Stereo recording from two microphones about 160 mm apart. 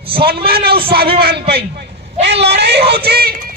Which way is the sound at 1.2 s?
85° right.